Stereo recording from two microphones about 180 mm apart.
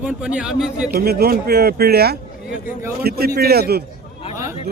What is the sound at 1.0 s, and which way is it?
Speech, 60° right (ahead or behind).